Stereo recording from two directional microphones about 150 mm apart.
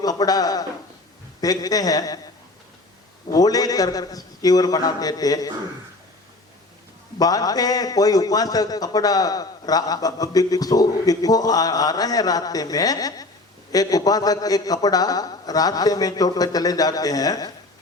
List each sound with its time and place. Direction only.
0.0 s a man's voice: 25° left (ahead or behind)
3.3 s a man's voice: 25° left (ahead or behind)
7.2 s a man's voice: 25° left (ahead or behind)